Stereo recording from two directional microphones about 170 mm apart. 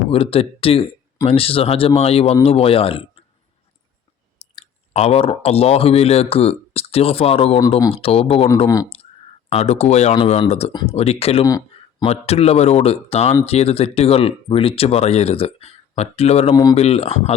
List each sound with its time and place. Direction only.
0.1 s speech: 35° left (ahead or behind)
4.6 s speech: 40° left (ahead or behind)
8.5 s speech: 25° left (ahead or behind)
9.5 s speech: 40° left (ahead or behind)
11.4 s a sound: 20° left (ahead or behind)
12.0 s speech: 40° left (ahead or behind)